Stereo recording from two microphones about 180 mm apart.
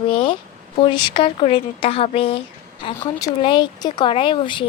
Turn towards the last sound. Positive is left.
turn(degrees=25)  # may be behind; listen again after turning